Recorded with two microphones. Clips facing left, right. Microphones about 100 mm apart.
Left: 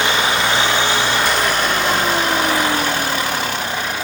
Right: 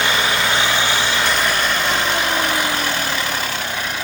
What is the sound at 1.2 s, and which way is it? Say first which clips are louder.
Vehicle: left 2 dB; 5° left (ahead or behind).